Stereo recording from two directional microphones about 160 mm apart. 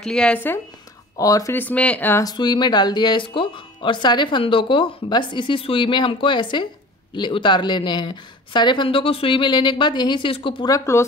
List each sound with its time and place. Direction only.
0.0 s speech: 5° left (ahead or behind)
1.1 s speech: 20° left (ahead or behind)
2.2 s speech: 25° left (ahead or behind)
10.7 s speech: 15° left (ahead or behind)